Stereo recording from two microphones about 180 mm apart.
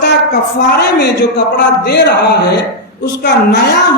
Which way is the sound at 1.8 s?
70° left (ahead or behind).